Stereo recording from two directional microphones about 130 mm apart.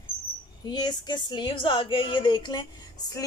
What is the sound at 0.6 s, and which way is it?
Speech, 35° left (ahead or behind).